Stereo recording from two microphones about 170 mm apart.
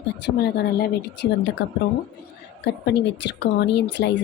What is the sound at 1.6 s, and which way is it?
A woman's voice, 90° left.